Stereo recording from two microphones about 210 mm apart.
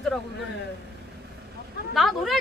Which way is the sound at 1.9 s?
Centre (ahead or behind).